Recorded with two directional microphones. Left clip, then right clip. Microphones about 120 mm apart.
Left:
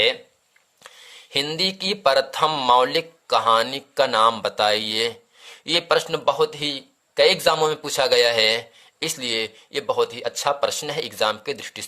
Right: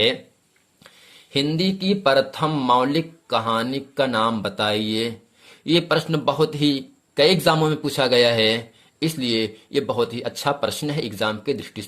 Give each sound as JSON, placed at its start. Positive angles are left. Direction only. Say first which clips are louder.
{"t": 0.9, "sound": "speech", "louder": "left 4 dB", "side_deg": 35}